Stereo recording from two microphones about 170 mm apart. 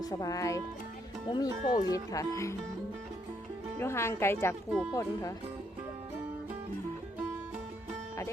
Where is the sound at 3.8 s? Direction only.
15° left (ahead or behind).